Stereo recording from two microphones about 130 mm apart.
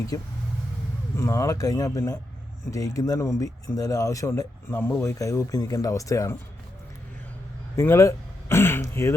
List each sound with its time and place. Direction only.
0.1 s speech: 30° left (ahead or behind)
7.8 s throat clearing: 20° left (ahead or behind)